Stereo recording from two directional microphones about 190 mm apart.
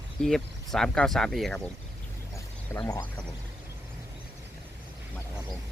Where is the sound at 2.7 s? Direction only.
20° left (ahead or behind).